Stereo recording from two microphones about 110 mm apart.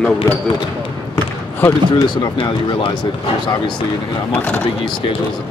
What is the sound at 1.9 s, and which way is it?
Speech, 35° left (ahead or behind).